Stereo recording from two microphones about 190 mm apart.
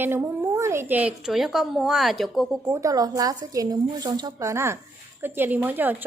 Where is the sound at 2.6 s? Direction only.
15° right (ahead or behind).